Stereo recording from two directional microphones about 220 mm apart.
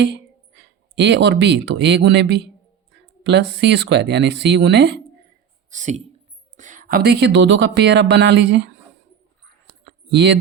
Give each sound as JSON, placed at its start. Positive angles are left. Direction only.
{"t": 0.5, "sound": "speech", "side_deg": -50}
{"t": 5.7, "sound": "speech", "side_deg": -30}
{"t": 9.8, "sound": "a sound", "side_deg": -50}